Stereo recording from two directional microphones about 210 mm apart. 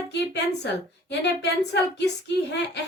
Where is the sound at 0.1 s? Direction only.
55° left (ahead or behind).